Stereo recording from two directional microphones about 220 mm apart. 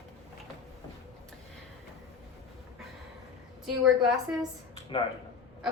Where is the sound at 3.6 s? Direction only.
Centre (ahead or behind).